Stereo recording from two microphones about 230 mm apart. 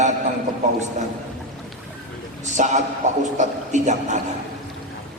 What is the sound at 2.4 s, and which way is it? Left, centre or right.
A man's voice, right.